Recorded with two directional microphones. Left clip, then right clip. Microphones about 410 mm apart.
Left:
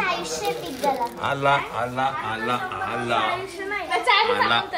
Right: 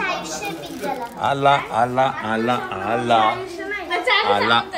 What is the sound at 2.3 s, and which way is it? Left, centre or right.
Speech, right.